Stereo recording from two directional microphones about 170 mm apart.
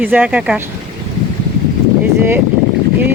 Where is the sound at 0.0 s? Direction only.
10° right (ahead or behind).